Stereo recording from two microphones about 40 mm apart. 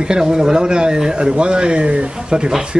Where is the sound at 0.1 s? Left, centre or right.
Centre.